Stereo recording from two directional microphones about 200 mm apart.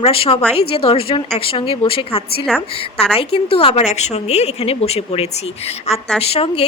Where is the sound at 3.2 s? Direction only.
30° left (ahead or behind).